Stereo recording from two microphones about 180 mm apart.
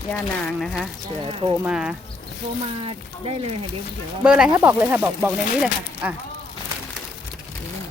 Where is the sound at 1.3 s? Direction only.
30° right (ahead or behind).